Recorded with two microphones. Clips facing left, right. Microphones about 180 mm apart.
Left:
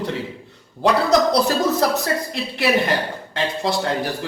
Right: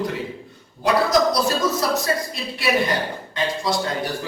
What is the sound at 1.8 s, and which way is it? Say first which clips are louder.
A woman's voice: left 2 dB; 65° left (ahead or behind).